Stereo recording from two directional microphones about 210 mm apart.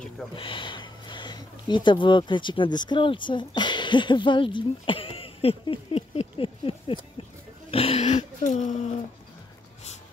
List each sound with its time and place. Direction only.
0.4 s speech: 25° left (ahead or behind)